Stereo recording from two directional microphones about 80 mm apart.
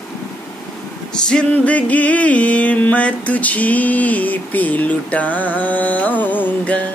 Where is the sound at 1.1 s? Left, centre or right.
Centre.